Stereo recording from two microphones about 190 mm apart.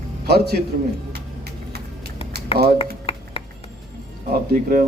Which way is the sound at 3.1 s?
30° left (ahead or behind).